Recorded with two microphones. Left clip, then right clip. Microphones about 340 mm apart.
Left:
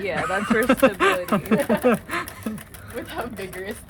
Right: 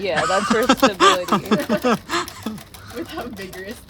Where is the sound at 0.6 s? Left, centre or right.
Centre.